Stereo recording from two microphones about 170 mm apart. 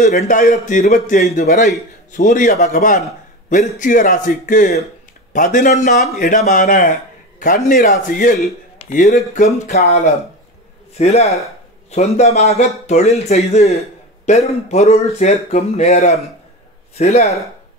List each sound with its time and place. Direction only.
0.0 s a man's voice: 45° left (ahead or behind)
11.0 s speech: 40° left (ahead or behind)